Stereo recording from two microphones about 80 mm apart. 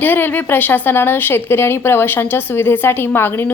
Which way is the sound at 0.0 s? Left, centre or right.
Left.